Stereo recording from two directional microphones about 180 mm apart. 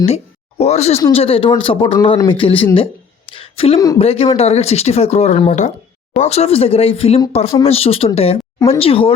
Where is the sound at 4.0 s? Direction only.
35° left (ahead or behind).